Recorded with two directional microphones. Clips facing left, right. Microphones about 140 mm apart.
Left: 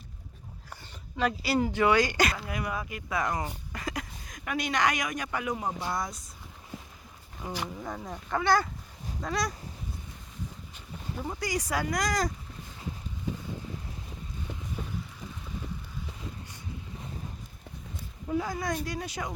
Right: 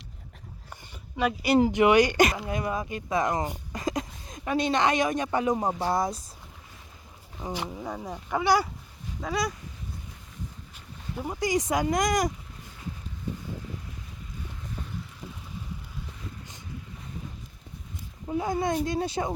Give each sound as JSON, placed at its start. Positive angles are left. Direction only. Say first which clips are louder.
{"t": 0.7, "sound": "speech", "louder": "right 1 dB", "side_deg": -15}
{"t": 7.4, "sound": "speech", "louder": "right 2 dB", "side_deg": -25}
{"t": 7.8, "sound": "speech", "louder": "right 3 dB", "side_deg": -10}
{"t": 11.2, "sound": "speech", "louder": "right 6 dB", "side_deg": -15}
{"t": 18.3, "sound": "speech", "louder": "right 3 dB", "side_deg": -25}